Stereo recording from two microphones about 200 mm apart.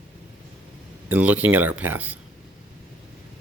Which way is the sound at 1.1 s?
5° right (ahead or behind).